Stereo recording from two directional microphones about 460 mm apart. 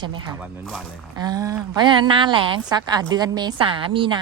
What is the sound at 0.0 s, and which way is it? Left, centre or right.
Speech, centre.